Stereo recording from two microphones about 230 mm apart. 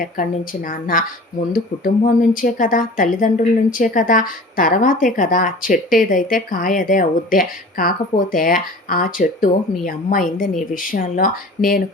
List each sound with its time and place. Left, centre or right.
0.0 s speech: left